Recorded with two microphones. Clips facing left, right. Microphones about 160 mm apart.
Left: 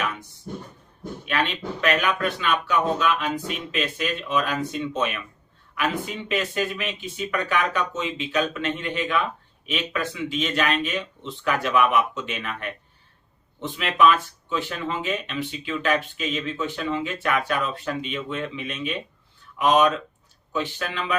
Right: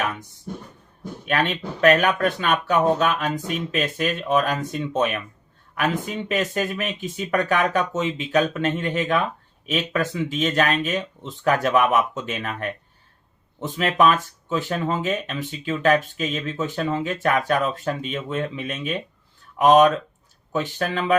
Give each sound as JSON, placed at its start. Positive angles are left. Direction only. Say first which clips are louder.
{"t": 1.2, "sound": "speech", "louder": "right 3 dB", "side_deg": -45}